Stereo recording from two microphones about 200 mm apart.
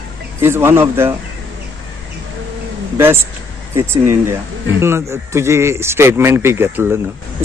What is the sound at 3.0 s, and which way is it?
A man's voice, 10° right (ahead or behind).